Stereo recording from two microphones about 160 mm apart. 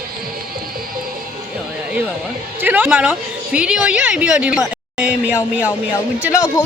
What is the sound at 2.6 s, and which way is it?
A woman's voice, 10° right (ahead or behind).